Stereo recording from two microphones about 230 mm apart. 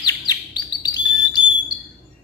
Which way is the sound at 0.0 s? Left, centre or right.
Centre.